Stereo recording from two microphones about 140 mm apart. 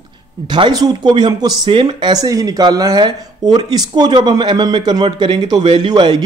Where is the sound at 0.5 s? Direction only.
30° right (ahead or behind).